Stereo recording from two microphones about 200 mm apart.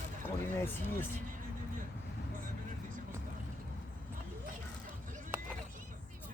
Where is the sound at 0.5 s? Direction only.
10° left (ahead or behind).